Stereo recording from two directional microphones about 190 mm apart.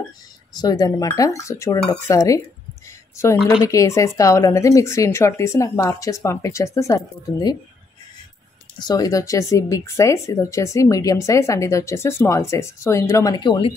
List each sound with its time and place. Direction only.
0.6 s speech: 20° left (ahead or behind)
3.6 s speech: 15° left (ahead or behind)
8.7 s speech: 20° left (ahead or behind)